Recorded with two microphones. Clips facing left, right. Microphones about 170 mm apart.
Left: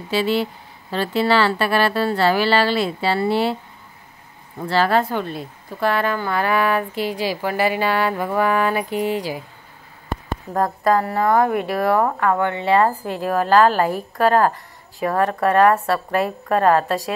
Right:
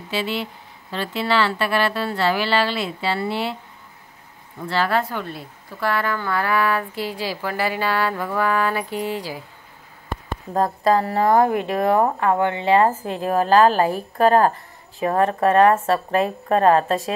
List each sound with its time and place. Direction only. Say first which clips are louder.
0.1 s speech: left 6 dB; 40° left (ahead or behind)
4.6 s a woman's voice: left 3 dB; 35° left (ahead or behind); by 9.4 s 15° left (ahead or behind)
10.5 s speech: even; 25° right (ahead or behind)